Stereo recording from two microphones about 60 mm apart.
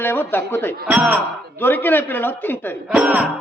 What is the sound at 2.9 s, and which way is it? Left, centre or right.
Speech, right.